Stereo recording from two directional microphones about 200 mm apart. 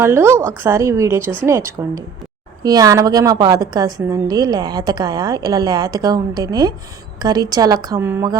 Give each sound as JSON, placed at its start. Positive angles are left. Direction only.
{"t": 0.0, "sound": "a woman's voice", "side_deg": -15}